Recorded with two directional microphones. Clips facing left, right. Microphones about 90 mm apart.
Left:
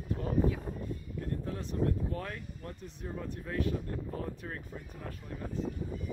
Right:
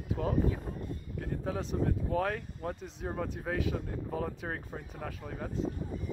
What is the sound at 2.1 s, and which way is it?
Speech, 90° right.